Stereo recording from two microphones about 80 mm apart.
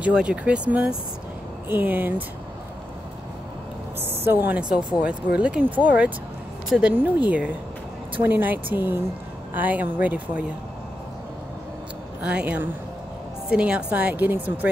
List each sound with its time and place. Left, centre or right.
0.0 s a woman's voice: centre
4.2 s a woman's voice: right
4.6 s a woman's voice: centre
12.2 s a woman's voice: centre